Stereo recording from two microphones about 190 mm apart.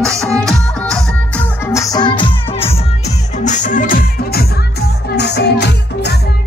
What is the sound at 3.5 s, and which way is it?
Music, 40° left (ahead or behind).